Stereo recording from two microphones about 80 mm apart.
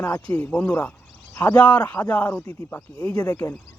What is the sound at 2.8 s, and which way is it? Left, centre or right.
Speech, centre.